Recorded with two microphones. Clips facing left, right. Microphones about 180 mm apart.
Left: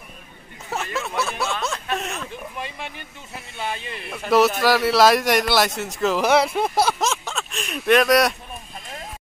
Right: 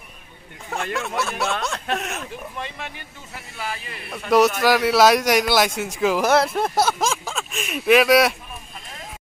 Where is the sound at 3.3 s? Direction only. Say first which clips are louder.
Left 2 dB; 25° left (ahead or behind).